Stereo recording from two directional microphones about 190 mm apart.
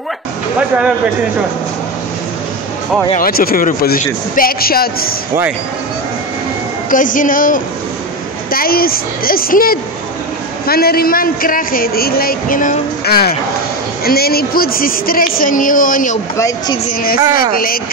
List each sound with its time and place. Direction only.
0.6 s speech: 5° right (ahead or behind)
3.2 s a man's voice: 50° left (ahead or behind)
6.9 s a man's voice: 45° left (ahead or behind)
16.3 s speech: 15° left (ahead or behind)